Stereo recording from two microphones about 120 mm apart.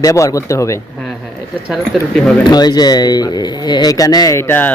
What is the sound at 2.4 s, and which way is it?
Speech, 35° left (ahead or behind).